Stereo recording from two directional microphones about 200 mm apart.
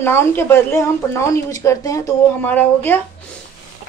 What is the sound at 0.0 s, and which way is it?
Speech, 10° left (ahead or behind).